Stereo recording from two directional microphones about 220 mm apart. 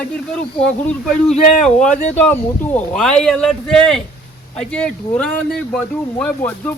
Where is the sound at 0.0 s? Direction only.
5° left (ahead or behind).